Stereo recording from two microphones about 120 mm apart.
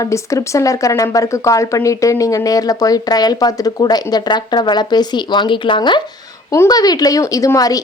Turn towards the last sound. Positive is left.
turn(degrees=30)  # may be behind; listen again after turning